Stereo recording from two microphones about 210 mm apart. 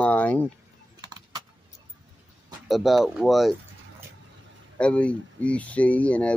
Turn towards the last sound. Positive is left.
turn(degrees=5)  # may be behind; listen again after turning